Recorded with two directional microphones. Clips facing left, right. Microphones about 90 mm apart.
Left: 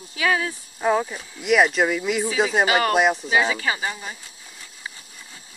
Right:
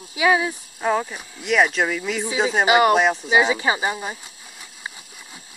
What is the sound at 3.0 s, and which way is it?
Speech, centre (ahead or behind).